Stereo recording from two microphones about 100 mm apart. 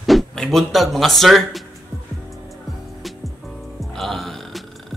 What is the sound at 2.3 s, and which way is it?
Music, centre (ahead or behind).